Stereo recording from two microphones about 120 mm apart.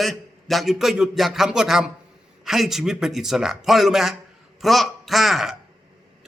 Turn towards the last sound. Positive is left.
turn(degrees=0)  # may be behind; listen again after turning